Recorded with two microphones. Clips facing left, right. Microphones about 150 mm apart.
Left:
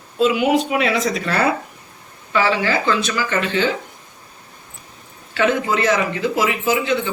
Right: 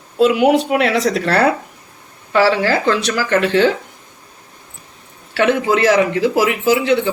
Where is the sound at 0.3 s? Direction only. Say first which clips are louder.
Right 3 dB; 60° right (ahead or behind).